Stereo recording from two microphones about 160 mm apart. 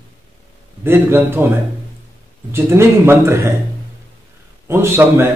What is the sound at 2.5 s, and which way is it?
A man's voice, 15° right (ahead or behind).